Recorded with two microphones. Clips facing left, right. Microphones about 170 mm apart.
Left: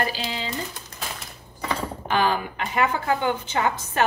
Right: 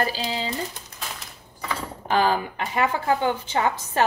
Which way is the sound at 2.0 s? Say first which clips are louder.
Right 2 dB; 35° right (ahead or behind).